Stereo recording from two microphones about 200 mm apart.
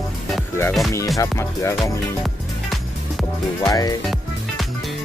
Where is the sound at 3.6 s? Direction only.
20° left (ahead or behind).